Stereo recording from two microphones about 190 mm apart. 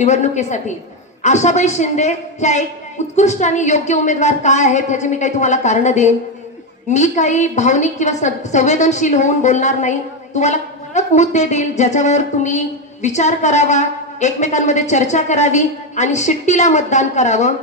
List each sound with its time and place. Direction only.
0.0 s a woman's voice: 35° left (ahead or behind)